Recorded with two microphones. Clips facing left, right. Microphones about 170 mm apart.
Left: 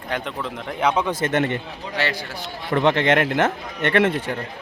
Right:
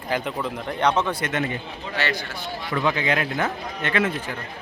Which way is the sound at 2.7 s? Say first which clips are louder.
Left 6 dB; 80° left.